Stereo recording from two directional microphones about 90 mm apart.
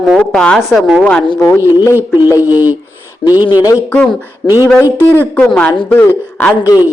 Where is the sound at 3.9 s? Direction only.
10° left (ahead or behind).